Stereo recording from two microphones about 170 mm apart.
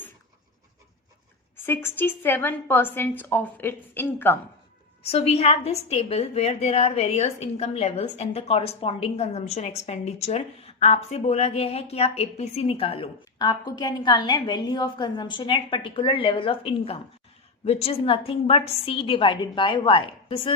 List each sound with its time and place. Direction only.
1.5 s a woman's voice: 15° left (ahead or behind)
5.0 s a woman's voice: 35° left (ahead or behind)